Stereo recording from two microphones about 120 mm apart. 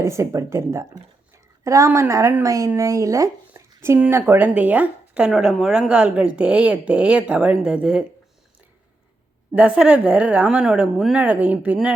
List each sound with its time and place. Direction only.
0.0 s speech: 25° right (ahead or behind)
3.5 s a sound: 20° right (ahead or behind)
4.1 s speech: 15° right (ahead or behind)
9.6 s speech: 10° right (ahead or behind)